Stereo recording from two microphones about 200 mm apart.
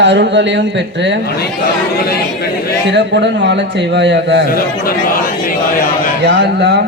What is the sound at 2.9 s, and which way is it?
Speech, 60° right (ahead or behind).